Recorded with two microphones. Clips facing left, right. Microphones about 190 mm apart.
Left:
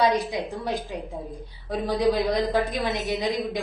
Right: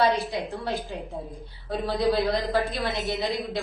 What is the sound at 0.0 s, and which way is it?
Speech, 15° left (ahead or behind).